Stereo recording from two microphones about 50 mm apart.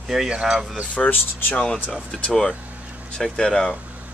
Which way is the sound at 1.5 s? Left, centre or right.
Centre.